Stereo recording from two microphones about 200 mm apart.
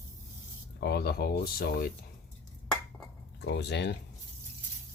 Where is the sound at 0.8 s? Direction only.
55° left (ahead or behind).